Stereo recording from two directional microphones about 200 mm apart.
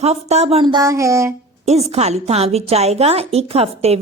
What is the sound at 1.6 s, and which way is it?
A woman's voice, 30° right (ahead or behind).